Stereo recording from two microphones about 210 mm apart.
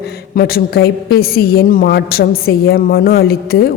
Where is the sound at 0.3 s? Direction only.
45° left (ahead or behind).